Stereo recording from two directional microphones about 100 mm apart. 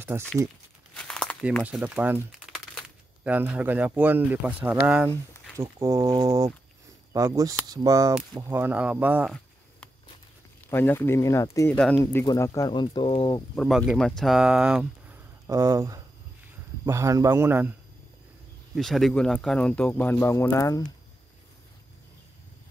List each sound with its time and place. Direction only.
0.1 s speech: 20° right (ahead or behind)
0.9 s crumpling: 5° left (ahead or behind)
1.6 s speech: 15° right (ahead or behind)
3.3 s speech: 15° right (ahead or behind)
5.6 s speech: 35° right (ahead or behind)
8.5 s speech: 20° right (ahead or behind)
10.7 s speech: 20° left (ahead or behind)
11.7 s speech: 10° left (ahead or behind)
12.0 s speech: 20° left (ahead or behind)
12.4 s speech: 40° left (ahead or behind); by 13.4 s 55° left (ahead or behind)
13.6 s speech: 5° right (ahead or behind)
14.4 s speech: 10° right (ahead or behind)
15.4 s speech: 30° right (ahead or behind)
18.8 s speech: centre (ahead or behind); by 20.8 s 35° left (ahead or behind)